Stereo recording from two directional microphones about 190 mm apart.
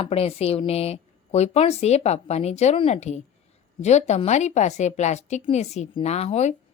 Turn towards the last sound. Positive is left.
turn(degrees=35)  # may be behind; listen again after turning